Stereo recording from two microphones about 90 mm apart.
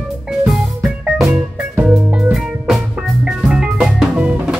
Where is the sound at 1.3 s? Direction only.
20° right (ahead or behind).